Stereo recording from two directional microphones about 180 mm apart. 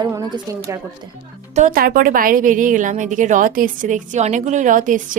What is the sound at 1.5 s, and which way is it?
A woman's voice, 45° right (ahead or behind).